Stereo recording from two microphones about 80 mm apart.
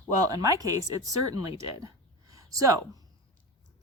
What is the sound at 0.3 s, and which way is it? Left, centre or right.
A woman's voice, right.